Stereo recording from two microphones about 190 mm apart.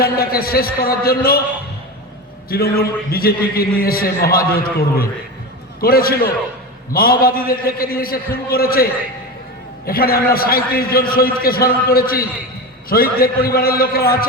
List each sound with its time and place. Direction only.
0.0 s a man's voice: 50° left (ahead or behind)
2.5 s a man's voice: 55° left (ahead or behind)